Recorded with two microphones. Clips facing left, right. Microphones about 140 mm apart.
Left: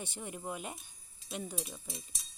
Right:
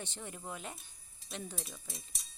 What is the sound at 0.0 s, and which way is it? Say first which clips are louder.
Speech: left 3 dB; 10° left (ahead or behind).